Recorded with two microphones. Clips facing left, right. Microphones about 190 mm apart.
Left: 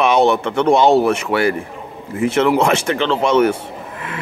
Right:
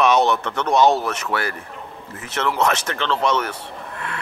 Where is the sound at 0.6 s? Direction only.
25° left (ahead or behind).